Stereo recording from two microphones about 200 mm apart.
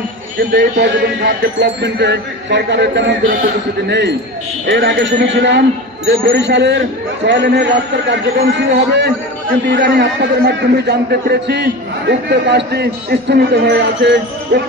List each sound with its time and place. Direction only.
0.4 s a man's voice: 45° right (ahead or behind)
1.6 s a man's voice: 60° right (ahead or behind)